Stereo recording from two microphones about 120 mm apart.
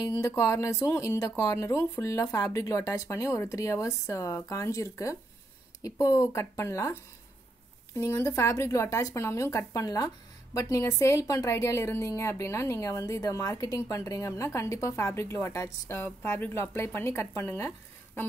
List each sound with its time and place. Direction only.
0.1 s speech: 25° left (ahead or behind)